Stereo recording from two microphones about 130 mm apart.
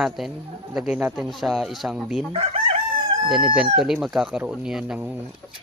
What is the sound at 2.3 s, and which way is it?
Chicken, 50° right (ahead or behind).